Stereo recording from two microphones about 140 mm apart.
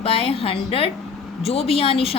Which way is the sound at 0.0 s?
45° left (ahead or behind).